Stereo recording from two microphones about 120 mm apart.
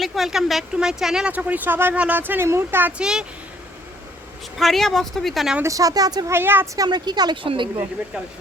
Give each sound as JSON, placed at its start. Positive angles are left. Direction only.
{"t": 0.0, "sound": "speech", "side_deg": 0}
{"t": 3.0, "sound": "speech", "side_deg": -5}
{"t": 4.5, "sound": "speech", "side_deg": 0}
{"t": 5.6, "sound": "speech", "side_deg": -30}
{"t": 6.3, "sound": "speech", "side_deg": -20}
{"t": 6.7, "sound": "speech", "side_deg": -35}